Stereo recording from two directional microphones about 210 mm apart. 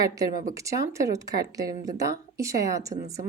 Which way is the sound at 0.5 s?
15° right (ahead or behind).